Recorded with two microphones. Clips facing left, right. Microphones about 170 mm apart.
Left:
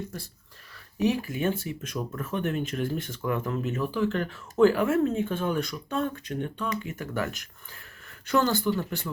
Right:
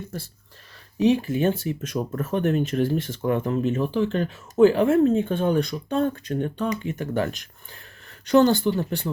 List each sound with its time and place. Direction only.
0.1 s speech: 30° right (ahead or behind)